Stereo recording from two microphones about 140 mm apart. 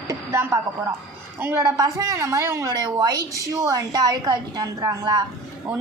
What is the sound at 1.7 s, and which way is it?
A woman's voice, 25° right (ahead or behind).